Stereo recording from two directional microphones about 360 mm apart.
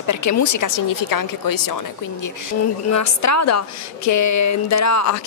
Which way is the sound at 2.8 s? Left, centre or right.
Left.